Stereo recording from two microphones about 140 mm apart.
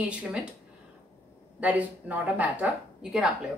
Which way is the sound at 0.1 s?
10° right (ahead or behind).